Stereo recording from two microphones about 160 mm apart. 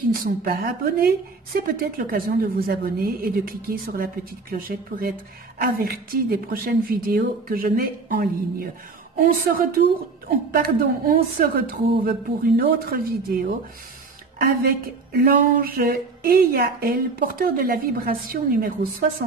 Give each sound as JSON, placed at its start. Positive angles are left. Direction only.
{"t": 0.1, "sound": "a woman's voice", "side_deg": -65}